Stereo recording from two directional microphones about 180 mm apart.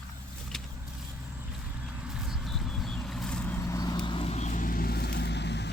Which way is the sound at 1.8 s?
5° right (ahead or behind).